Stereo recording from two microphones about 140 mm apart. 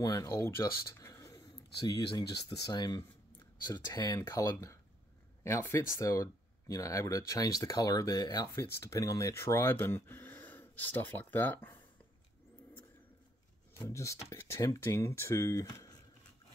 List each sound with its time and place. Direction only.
0.0 s speech: 25° left (ahead or behind)
13.7 s speech: 20° left (ahead or behind)